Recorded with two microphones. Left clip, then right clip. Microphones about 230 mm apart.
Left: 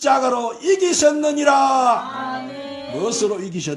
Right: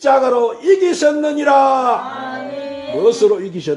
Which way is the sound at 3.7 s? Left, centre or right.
Left.